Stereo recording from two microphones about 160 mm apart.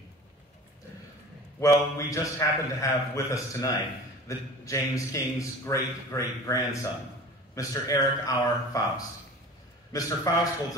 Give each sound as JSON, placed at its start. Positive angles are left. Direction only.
{"t": 1.6, "sound": "a man's voice", "side_deg": 20}